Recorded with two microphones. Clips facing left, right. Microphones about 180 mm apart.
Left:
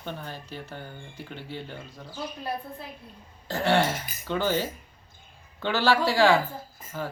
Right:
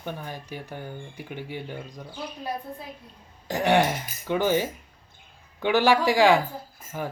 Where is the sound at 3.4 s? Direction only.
15° right (ahead or behind).